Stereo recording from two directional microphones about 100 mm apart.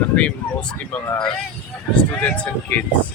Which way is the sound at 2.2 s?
20° left (ahead or behind).